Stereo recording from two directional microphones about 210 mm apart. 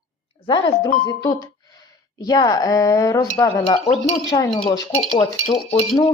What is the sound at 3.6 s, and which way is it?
Speech, 30° left (ahead or behind).